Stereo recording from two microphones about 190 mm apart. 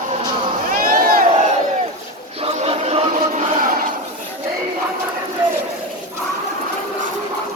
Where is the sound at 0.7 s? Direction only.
50° right (ahead or behind).